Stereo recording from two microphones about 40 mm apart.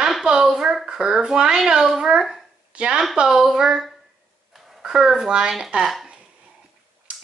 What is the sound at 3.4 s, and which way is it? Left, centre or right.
A child's voice, centre.